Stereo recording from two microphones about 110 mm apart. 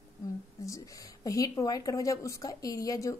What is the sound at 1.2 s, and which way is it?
Speech, 30° left (ahead or behind).